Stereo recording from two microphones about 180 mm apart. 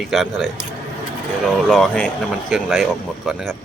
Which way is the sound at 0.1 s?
Centre (ahead or behind).